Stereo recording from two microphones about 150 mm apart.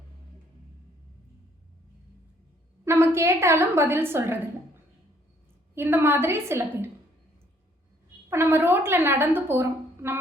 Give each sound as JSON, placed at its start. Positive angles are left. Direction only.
{"t": 2.8, "sound": "a woman's voice", "side_deg": -15}
{"t": 5.7, "sound": "a woman's voice", "side_deg": -15}
{"t": 8.3, "sound": "a woman's voice", "side_deg": -15}